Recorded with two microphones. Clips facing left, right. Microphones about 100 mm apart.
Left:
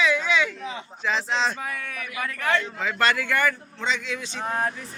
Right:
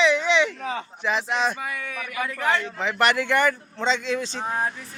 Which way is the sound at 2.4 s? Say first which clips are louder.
Even; 20° right (ahead or behind).